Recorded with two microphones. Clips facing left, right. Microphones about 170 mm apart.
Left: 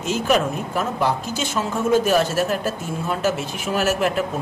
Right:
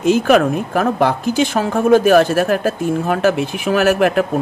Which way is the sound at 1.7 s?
55° right (ahead or behind).